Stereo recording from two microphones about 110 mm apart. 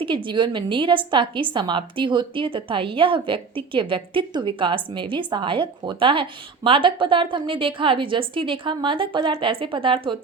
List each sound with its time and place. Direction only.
0.0 s a woman's voice: 45° right (ahead or behind)